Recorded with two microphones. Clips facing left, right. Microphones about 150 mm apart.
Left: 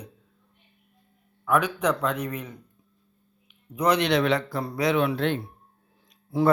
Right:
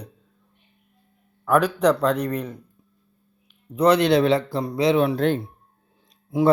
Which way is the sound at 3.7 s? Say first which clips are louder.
Right 5 dB; 30° right (ahead or behind).